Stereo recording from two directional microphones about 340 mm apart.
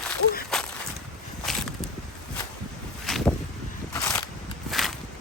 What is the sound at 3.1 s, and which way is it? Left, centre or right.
Boat, centre.